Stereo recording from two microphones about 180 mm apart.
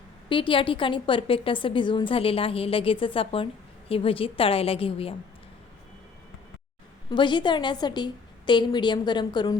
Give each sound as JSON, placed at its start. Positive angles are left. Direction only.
{"t": 0.3, "sound": "a woman's voice", "side_deg": 30}
{"t": 7.1, "sound": "a woman's voice", "side_deg": 25}